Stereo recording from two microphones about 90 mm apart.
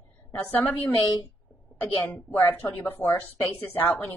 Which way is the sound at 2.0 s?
25° left (ahead or behind).